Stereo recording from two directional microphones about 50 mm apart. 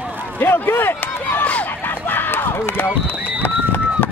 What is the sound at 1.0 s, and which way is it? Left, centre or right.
Run, left.